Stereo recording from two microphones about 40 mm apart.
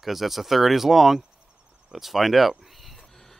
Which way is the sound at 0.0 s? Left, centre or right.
Centre.